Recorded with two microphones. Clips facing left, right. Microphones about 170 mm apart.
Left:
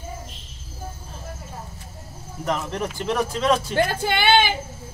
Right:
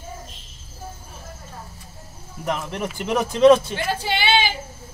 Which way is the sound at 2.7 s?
10° right (ahead or behind).